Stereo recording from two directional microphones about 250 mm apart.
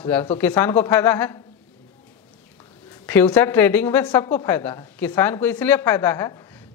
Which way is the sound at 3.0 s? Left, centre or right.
Centre.